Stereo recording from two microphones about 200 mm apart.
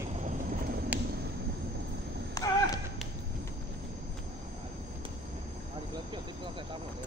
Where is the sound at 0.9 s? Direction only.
10° right (ahead or behind).